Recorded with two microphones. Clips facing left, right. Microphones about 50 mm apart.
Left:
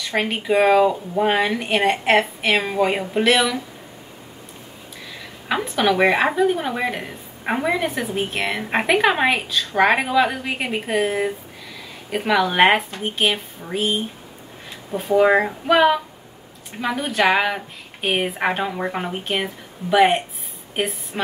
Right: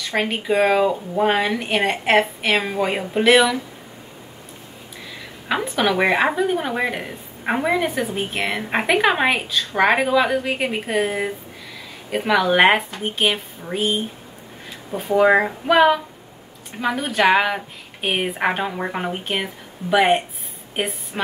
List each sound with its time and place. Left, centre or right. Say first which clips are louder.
0.0 s speech: even; centre
5.5 s a woman's voice: left 1 dB; centre